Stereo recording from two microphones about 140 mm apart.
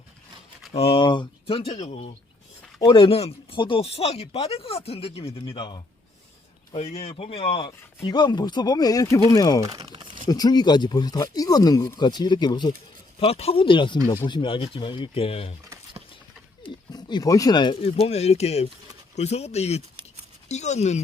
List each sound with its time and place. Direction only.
0.7 s speech: 45° left (ahead or behind)
6.7 s speech: 50° left (ahead or behind); by 9.6 s 25° left (ahead or behind)
9.6 s speech: 25° right (ahead or behind)
10.2 s speech: 30° left (ahead or behind)
13.1 s speech: 45° left (ahead or behind)
16.6 s speech: 30° left (ahead or behind); by 21.0 s 55° left (ahead or behind)